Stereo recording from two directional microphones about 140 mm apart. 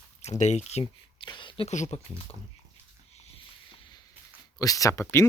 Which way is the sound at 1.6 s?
55° left (ahead or behind).